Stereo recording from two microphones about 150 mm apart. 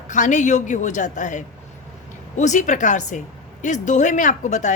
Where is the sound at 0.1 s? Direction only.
55° left (ahead or behind).